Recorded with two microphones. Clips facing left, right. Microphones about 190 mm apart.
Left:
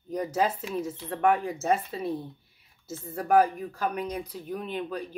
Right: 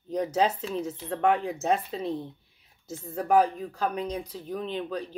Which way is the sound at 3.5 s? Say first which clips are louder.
Right 1 dB; 10° left (ahead or behind).